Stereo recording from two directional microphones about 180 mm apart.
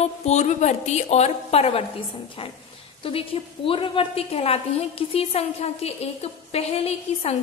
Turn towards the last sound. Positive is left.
turn(degrees=35)  # may be behind; listen again after turning